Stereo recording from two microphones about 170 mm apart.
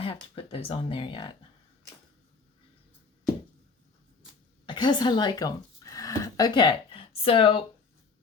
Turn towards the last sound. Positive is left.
turn(degrees=30)  # may be behind; listen again after turning